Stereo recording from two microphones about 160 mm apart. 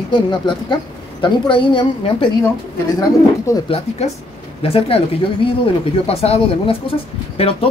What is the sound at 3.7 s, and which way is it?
A woman's voice, 45° left (ahead or behind).